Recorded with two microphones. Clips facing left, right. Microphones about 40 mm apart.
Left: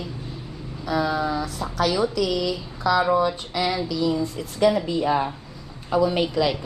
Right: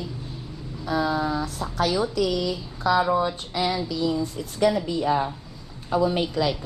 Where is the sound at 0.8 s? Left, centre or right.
Left.